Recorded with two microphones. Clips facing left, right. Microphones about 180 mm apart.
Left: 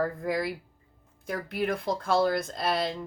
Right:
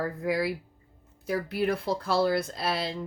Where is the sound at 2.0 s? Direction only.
50° left (ahead or behind).